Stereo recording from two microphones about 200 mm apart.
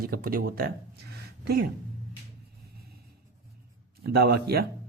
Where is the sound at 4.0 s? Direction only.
50° right (ahead or behind).